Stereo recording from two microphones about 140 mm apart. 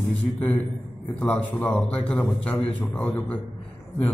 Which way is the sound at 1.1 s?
10° left (ahead or behind).